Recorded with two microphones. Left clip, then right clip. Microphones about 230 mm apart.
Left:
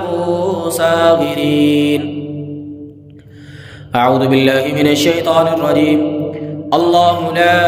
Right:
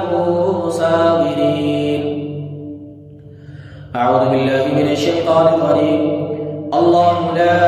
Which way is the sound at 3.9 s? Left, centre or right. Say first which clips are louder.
Left 2 dB; left.